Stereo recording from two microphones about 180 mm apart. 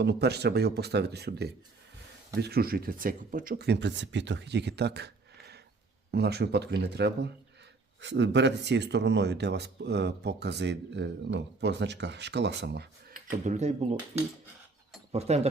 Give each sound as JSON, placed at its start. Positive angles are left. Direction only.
{"t": 0.0, "sound": "a man's voice", "side_deg": -65}
{"t": 8.0, "sound": "speech", "side_deg": -80}
{"t": 13.4, "sound": "speech", "side_deg": -40}
{"t": 15.1, "sound": "speech", "side_deg": -35}